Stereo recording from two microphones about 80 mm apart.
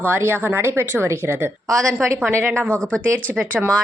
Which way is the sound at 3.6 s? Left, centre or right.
Centre.